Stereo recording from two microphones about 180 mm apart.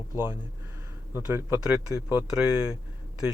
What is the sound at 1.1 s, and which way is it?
Speech, 15° right (ahead or behind).